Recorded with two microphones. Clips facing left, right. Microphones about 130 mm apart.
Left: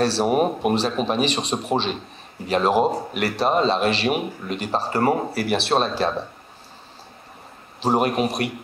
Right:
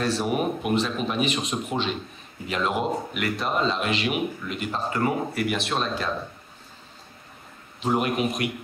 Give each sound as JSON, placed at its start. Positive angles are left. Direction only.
{"t": 0.0, "sound": "speech", "side_deg": 30}
{"t": 0.3, "sound": "speech", "side_deg": 40}
{"t": 7.8, "sound": "speech", "side_deg": 35}